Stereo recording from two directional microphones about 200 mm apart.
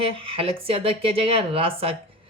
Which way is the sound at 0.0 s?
25° right (ahead or behind).